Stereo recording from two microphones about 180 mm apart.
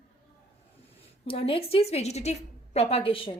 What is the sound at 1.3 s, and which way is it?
A woman's voice, 30° left (ahead or behind).